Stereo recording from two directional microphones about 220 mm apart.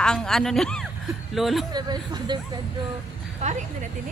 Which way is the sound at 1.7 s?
20° right (ahead or behind).